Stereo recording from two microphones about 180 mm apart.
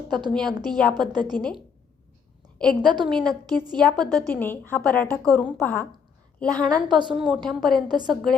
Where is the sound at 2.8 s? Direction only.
25° right (ahead or behind).